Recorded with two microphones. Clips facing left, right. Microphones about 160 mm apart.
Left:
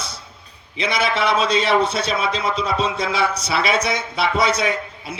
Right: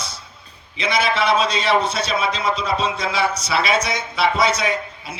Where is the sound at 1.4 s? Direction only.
55° left (ahead or behind).